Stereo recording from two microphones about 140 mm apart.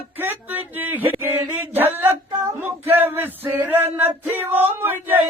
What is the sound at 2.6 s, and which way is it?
Male singing, 15° right (ahead or behind).